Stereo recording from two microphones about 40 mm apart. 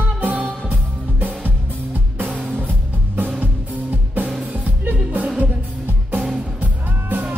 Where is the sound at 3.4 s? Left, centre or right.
Right.